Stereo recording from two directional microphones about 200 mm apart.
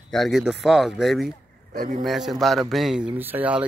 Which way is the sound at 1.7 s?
40° right (ahead or behind).